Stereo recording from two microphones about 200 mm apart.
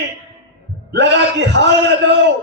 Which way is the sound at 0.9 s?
60° right (ahead or behind).